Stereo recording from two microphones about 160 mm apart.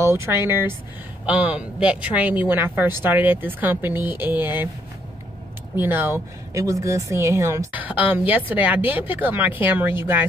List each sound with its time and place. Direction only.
0.0 s speech: 15° right (ahead or behind)
5.8 s speech: 15° right (ahead or behind)